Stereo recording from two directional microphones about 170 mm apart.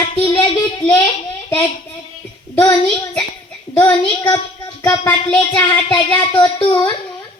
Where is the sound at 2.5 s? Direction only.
15° left (ahead or behind).